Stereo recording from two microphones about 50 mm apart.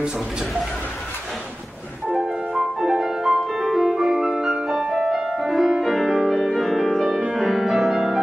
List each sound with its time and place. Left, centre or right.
2.0 s music: right
2.5 s music: centre